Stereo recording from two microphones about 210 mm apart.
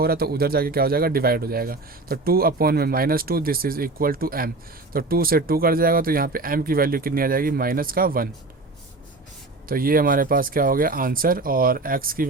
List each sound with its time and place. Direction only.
0.0 s speech: 45° right (ahead or behind)
9.6 s speech: 45° right (ahead or behind)